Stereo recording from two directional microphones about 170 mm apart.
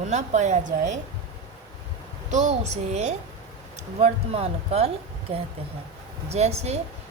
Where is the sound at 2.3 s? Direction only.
40° right (ahead or behind).